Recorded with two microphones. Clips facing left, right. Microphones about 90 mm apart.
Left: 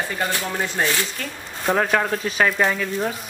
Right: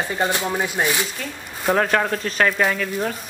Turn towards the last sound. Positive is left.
turn(degrees=0)  # may be behind; listen again after turning